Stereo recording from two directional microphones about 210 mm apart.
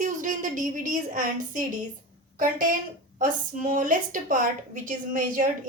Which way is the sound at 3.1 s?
40° right (ahead or behind).